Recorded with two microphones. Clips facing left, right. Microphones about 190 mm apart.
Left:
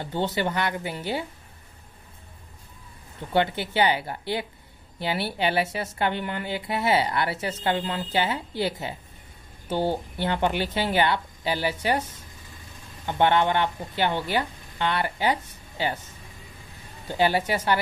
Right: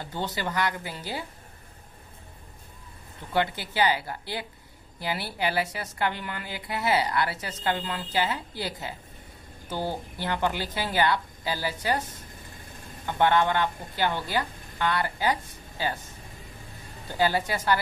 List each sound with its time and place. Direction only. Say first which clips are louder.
0.0 s a woman's voice: left 5 dB; 25° left (ahead or behind)
3.3 s a woman's voice: left 3 dB; 25° left (ahead or behind)
13.0 s a woman's voice: left 1 dB; 25° left (ahead or behind)
17.1 s a woman's voice: left 3 dB; 20° left (ahead or behind)